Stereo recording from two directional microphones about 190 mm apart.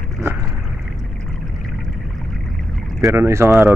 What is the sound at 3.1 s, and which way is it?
Speech, 15° right (ahead or behind).